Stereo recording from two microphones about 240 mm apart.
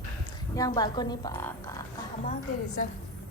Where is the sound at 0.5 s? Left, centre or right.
Centre.